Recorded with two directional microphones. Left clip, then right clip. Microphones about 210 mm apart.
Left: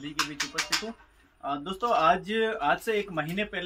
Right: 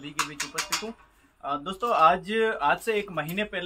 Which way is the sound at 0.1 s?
45° right (ahead or behind).